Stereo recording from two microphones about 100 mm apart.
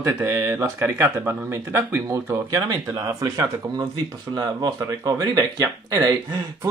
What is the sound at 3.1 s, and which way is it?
Speech, 35° right (ahead or behind).